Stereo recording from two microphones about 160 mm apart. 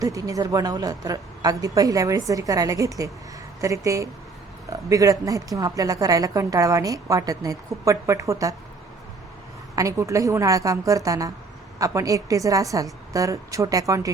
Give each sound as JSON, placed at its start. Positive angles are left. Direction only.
{"t": 0.0, "sound": "a woman's voice", "side_deg": -20}
{"t": 9.7, "sound": "a woman's voice", "side_deg": -20}